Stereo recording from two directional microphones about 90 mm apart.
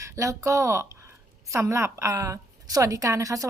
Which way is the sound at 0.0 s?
35° right (ahead or behind).